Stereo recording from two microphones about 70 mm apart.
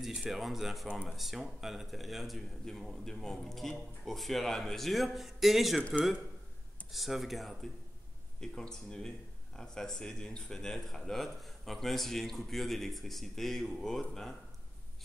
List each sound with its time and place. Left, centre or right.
0.0 s speech: centre
5.8 s speech: centre
6.9 s speech: centre